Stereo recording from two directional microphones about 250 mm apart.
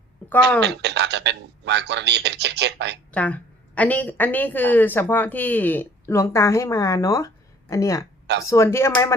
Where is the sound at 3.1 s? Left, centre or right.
Centre.